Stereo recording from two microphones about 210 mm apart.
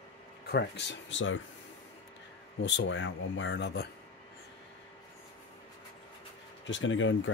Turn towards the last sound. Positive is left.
turn(degrees=65)  # may be behind; listen again after turning